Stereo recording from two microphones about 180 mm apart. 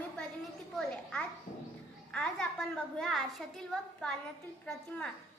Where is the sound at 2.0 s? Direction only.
5° left (ahead or behind).